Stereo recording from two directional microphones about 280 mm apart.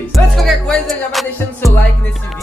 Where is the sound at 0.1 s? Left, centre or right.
Centre.